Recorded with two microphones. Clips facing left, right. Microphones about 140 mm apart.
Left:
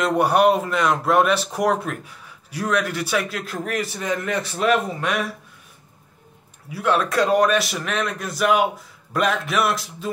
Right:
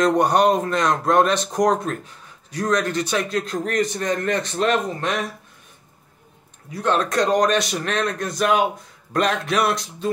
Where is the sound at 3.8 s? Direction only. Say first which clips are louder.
Right 3 dB; 5° left (ahead or behind).